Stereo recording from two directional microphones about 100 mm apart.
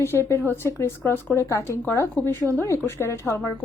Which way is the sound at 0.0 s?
25° left (ahead or behind).